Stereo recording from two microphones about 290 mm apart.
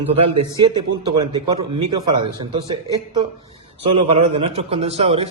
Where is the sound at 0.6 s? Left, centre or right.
Centre.